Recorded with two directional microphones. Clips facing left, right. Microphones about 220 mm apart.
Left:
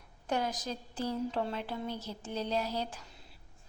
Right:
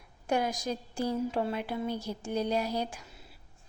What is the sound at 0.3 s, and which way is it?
A woman's voice, 10° right (ahead or behind).